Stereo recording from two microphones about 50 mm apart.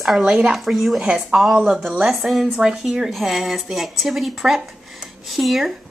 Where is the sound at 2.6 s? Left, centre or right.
Centre.